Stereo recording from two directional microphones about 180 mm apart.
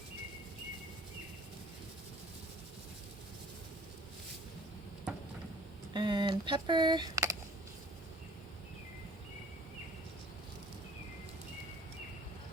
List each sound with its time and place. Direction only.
5.9 s speech: 25° right (ahead or behind)